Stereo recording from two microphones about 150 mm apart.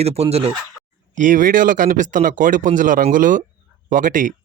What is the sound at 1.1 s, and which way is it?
Speech, 60° right (ahead or behind).